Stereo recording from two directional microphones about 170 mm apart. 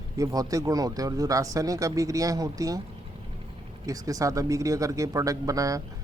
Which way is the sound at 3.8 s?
20° right (ahead or behind).